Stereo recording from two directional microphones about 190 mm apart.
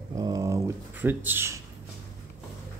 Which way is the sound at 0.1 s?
20° right (ahead or behind).